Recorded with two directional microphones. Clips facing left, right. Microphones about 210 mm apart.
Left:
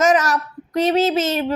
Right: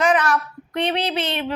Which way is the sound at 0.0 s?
40° left (ahead or behind).